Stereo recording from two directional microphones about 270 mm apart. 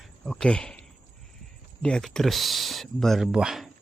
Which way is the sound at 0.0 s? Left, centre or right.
Centre.